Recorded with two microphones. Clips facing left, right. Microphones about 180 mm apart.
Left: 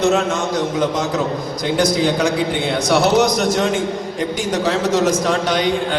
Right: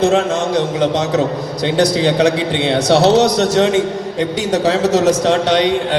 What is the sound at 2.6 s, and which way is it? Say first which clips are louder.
Speech: right 5 dB; 30° right (ahead or behind).